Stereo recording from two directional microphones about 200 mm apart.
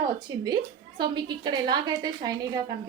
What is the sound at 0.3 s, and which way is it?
A woman's voice, 20° right (ahead or behind).